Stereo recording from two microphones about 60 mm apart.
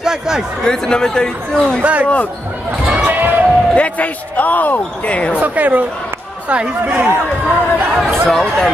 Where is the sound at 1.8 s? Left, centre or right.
Right.